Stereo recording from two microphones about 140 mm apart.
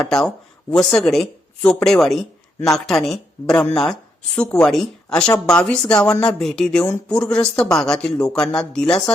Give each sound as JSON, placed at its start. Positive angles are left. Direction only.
{"t": 0.0, "sound": "speech", "side_deg": 5}